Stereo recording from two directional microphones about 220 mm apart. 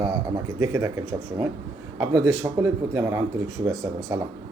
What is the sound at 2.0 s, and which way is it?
Speech, 15° right (ahead or behind).